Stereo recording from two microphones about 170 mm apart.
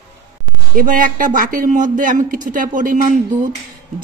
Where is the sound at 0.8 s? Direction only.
55° right (ahead or behind).